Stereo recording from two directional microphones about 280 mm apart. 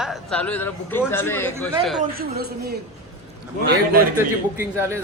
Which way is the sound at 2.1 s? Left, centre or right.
Right.